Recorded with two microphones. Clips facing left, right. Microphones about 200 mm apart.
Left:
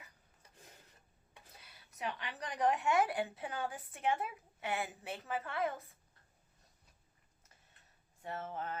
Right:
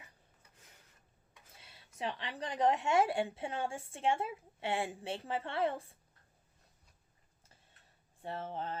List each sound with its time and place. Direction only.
1.5 s a woman's voice: 25° right (ahead or behind)
8.2 s a woman's voice: 30° right (ahead or behind)